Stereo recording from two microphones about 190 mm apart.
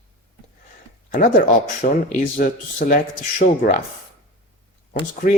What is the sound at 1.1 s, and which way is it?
Speech, 40° left (ahead or behind).